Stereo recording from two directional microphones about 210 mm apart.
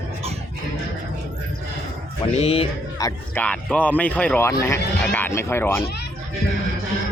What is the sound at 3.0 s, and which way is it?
Speech, 10° left (ahead or behind).